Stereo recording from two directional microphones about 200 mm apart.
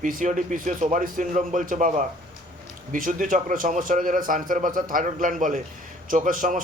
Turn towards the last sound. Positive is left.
turn(degrees=-40)  # may be behind; listen again after turning